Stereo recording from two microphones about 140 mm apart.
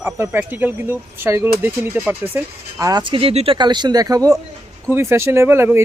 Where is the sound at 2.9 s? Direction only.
30° right (ahead or behind).